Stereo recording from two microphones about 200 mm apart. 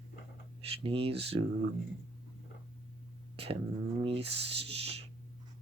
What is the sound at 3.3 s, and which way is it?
Beatboxing, 30° right (ahead or behind).